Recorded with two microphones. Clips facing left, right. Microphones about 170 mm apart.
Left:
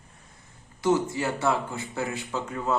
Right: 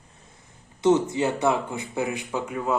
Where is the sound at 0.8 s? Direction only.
20° right (ahead or behind).